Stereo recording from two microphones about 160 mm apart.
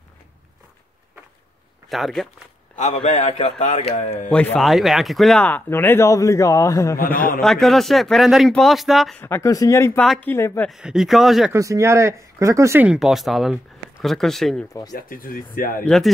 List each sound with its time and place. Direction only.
1.9 s speech: centre (ahead or behind)
2.9 s a man's voice: 45° left (ahead or behind)
4.3 s speech: 5° left (ahead or behind)
5.4 s speech: 10° left (ahead or behind)
7.2 s speech: 65° left (ahead or behind)
7.4 s speech: centre (ahead or behind)
9.2 s speech: 15° left (ahead or behind)
9.9 s speech: 5° left (ahead or behind)
10.3 s speech: 15° left (ahead or behind)
10.7 s speech: 5° right (ahead or behind)
11.5 s speech: 20° right (ahead or behind); by 14.7 s 5° left (ahead or behind)
14.7 s speech: 25° left (ahead or behind)
15.0 s speech: 60° left (ahead or behind)
15.8 s speech: centre (ahead or behind)